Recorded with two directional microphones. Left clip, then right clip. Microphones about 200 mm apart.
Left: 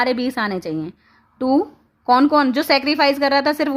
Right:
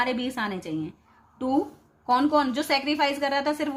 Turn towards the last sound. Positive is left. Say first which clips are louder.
# left 8 dB
turn(degrees=50)  # may be behind; listen again after turning